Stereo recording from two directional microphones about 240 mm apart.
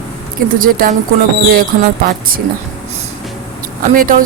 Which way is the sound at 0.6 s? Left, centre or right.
Right.